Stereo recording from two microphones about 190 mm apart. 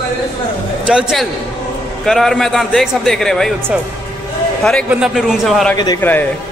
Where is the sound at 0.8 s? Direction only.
Centre (ahead or behind).